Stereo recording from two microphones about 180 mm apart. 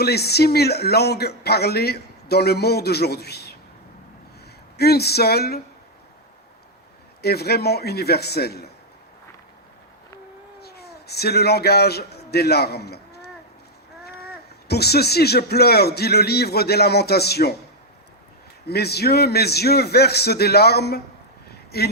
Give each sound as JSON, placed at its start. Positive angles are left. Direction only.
{"t": 0.0, "sound": "speech", "side_deg": 65}
{"t": 4.8, "sound": "speech", "side_deg": 65}
{"t": 7.2, "sound": "speech", "side_deg": 60}
{"t": 10.6, "sound": "speech", "side_deg": 65}
{"t": 14.7, "sound": "speech", "side_deg": 65}
{"t": 18.7, "sound": "speech", "side_deg": 65}